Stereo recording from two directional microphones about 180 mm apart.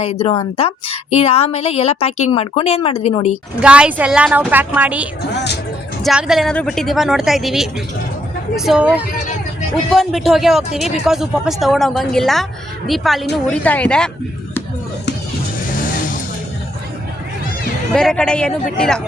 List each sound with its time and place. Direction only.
0.0 s a woman's voice: 35° left (ahead or behind)
3.6 s a woman's voice: 5° right (ahead or behind)
17.9 s a woman's voice: 5° left (ahead or behind)